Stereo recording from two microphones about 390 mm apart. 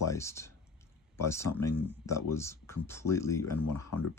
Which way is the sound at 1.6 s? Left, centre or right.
Left.